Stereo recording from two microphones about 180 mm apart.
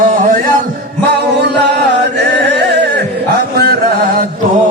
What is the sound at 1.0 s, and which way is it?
Music, 65° right (ahead or behind).